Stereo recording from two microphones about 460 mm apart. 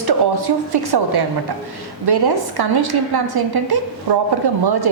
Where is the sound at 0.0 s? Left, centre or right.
Right.